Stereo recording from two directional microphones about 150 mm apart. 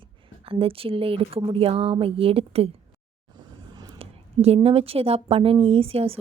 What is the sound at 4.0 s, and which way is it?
A woman's voice, 45° right (ahead or behind).